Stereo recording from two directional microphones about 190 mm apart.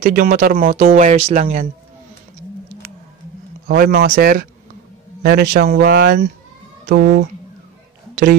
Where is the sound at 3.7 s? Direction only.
55° right (ahead or behind).